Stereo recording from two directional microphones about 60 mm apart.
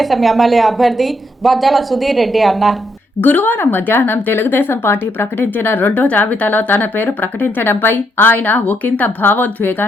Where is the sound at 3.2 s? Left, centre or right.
Left.